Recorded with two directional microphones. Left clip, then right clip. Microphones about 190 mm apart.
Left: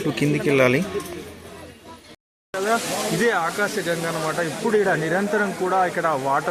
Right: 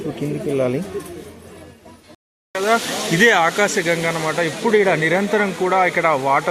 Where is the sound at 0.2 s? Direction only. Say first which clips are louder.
Left 3 dB; 5° left (ahead or behind).